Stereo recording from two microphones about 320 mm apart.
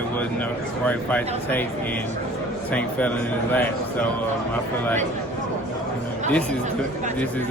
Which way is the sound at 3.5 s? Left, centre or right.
Centre.